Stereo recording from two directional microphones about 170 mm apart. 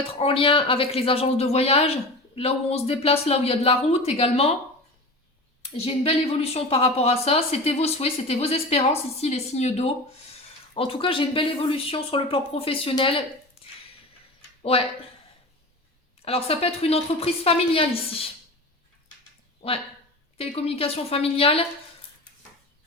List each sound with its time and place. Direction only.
0.2 s speech: 30° left (ahead or behind)
5.7 s speech: 35° left (ahead or behind)
14.6 s speech: 35° left (ahead or behind)
16.2 s speech: 35° left (ahead or behind)
20.4 s speech: 35° left (ahead or behind)